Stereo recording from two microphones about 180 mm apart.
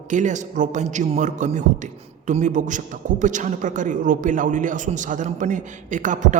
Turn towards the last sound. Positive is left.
turn(degrees=-45)  # may be behind; listen again after turning